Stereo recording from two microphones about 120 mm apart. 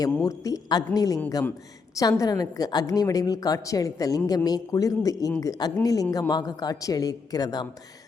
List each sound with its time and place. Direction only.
0.0 s a woman's voice: 30° left (ahead or behind)